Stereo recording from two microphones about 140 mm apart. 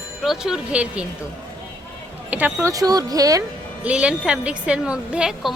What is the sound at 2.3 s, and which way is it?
Speech, 15° right (ahead or behind).